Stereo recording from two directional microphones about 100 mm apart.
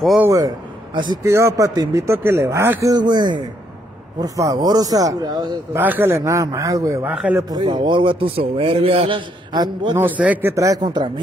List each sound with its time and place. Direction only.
0.9 s speech: 50° right (ahead or behind)
1.2 s speech: 30° right (ahead or behind)
2.9 s speech: 45° right (ahead or behind)
5.7 s speech: 20° right (ahead or behind)
7.4 s a man's voice: 45° right (ahead or behind); by 9.2 s 70° right (ahead or behind)
9.5 s speech: 45° right (ahead or behind)
9.9 s a man's voice: 15° right (ahead or behind)
10.5 s speech: 35° right (ahead or behind)
10.8 s speech: 50° right (ahead or behind)